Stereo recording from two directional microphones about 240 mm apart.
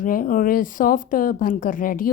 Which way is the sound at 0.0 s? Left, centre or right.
Left.